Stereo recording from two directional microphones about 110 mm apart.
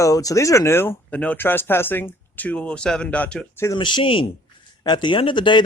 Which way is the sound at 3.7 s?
45° left (ahead or behind).